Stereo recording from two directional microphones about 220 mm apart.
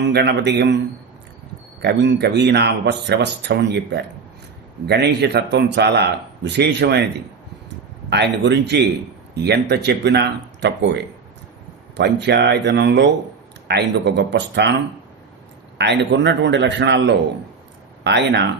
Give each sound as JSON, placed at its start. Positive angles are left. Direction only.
{"t": 0.1, "sound": "a man's voice", "side_deg": -50}
{"t": 1.8, "sound": "a man's voice", "side_deg": -50}
{"t": 8.1, "sound": "a man's voice", "side_deg": -50}
{"t": 15.8, "sound": "a man's voice", "side_deg": -50}